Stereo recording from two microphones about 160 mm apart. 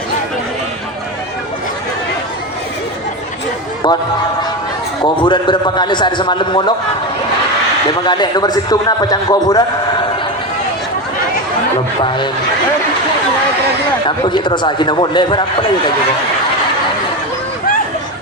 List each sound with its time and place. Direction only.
3.8 s a man's voice: 25° left (ahead or behind)
5.0 s a man's voice: 30° left (ahead or behind)
8.0 s a man's voice: 25° left (ahead or behind)
14.3 s a man's voice: 30° left (ahead or behind)